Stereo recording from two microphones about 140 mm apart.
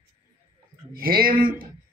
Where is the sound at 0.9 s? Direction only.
90° right.